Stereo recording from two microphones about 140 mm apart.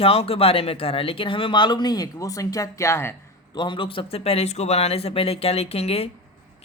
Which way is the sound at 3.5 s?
35° left (ahead or behind).